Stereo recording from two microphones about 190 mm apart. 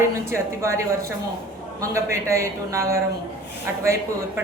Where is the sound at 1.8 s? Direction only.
15° right (ahead or behind).